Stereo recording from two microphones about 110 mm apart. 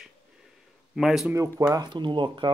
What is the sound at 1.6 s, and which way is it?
Speech, 30° right (ahead or behind).